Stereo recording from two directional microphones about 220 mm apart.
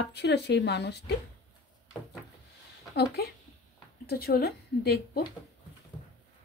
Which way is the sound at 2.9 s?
45° left (ahead or behind).